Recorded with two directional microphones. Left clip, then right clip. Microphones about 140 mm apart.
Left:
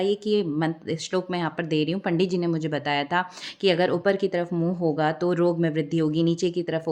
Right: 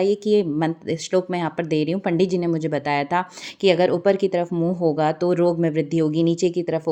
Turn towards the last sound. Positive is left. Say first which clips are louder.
# right 4 dB
turn(degrees=-20)  # may be behind; listen again after turning